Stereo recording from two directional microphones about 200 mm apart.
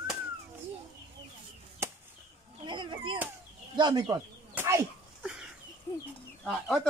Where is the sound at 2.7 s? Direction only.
25° right (ahead or behind).